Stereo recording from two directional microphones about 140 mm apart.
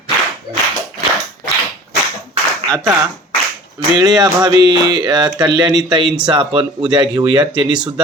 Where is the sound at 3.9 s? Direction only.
30° right (ahead or behind).